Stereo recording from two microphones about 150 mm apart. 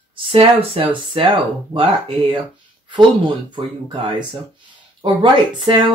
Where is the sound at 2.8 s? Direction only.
35° right (ahead or behind).